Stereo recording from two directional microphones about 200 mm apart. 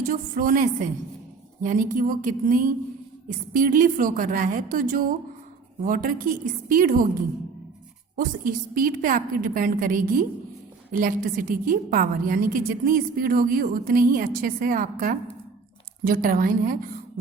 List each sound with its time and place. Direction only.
0.1 s a woman's voice: 45° right (ahead or behind)
8.1 s a woman's voice: 45° right (ahead or behind)